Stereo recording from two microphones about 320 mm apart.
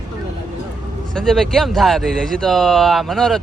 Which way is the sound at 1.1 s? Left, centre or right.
Centre.